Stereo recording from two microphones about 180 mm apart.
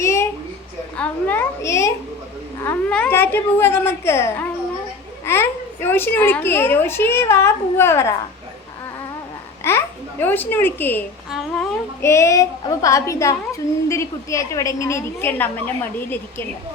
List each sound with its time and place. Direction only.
0.0 s a sound: 15° left (ahead or behind)
0.9 s a child's voice: 10° left (ahead or behind)
9.6 s a child's voice: 10° left (ahead or behind)
11.3 s speech: centre (ahead or behind)
12.0 s a child's voice: 15° left (ahead or behind)